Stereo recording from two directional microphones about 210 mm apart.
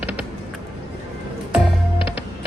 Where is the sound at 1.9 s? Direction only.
25° left (ahead or behind).